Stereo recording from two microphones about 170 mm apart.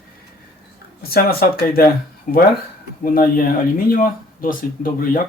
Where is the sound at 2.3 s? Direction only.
50° left (ahead or behind).